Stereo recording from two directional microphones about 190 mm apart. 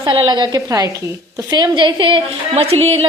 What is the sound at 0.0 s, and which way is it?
A woman's voice, 25° right (ahead or behind).